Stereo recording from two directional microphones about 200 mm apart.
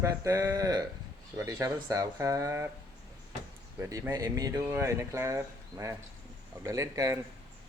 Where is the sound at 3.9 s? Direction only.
15° right (ahead or behind).